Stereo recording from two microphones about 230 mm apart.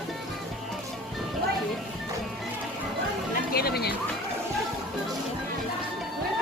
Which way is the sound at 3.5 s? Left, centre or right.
Left.